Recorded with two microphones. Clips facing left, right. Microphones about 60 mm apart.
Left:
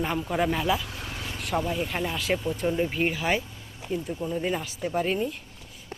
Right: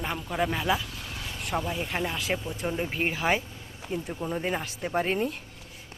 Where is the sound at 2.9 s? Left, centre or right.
Right.